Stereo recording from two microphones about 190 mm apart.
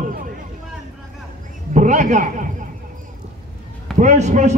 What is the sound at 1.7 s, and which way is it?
Speech, 40° right (ahead or behind).